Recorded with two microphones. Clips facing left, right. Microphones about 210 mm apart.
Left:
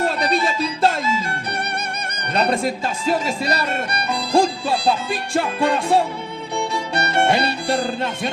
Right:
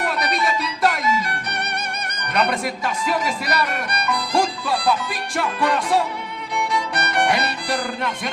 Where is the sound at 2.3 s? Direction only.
30° left (ahead or behind).